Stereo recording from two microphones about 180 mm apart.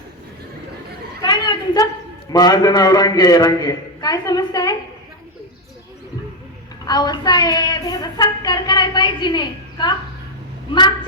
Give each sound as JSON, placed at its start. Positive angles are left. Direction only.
{"t": 1.2, "sound": "a sound", "side_deg": 20}
{"t": 2.3, "sound": "a woman's voice", "side_deg": 20}
{"t": 6.8, "sound": "a woman's voice", "side_deg": 20}